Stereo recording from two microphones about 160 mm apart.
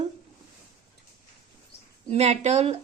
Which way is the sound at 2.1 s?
40° right (ahead or behind).